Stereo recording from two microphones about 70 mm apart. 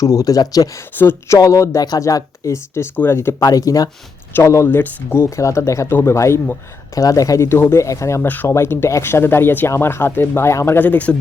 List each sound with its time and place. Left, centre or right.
0.0 s speech: left
0.9 s speech: left
1.3 s speech: left
2.9 s speech: left
3.4 s speech: left
4.4 s speech: left
4.7 s speech: left
5.4 s speech: left
7.4 s speech: left
10.8 s speech: left